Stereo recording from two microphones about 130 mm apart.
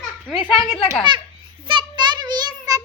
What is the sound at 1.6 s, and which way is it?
Child singing, 40° right (ahead or behind).